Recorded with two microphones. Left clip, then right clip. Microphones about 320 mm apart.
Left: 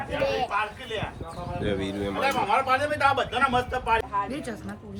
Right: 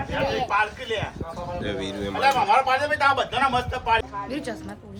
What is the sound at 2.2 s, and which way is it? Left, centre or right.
Speech, right.